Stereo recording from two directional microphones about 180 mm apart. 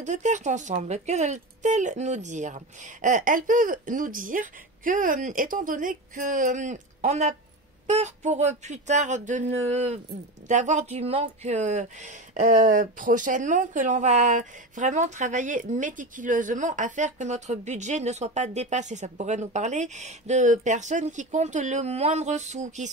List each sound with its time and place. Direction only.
0.0 s speech: 40° right (ahead or behind)